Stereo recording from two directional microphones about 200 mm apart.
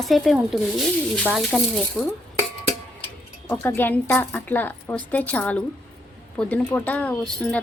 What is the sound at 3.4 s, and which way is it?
Speech, 10° left (ahead or behind).